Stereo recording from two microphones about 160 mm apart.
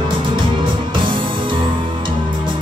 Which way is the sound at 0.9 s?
30° right (ahead or behind).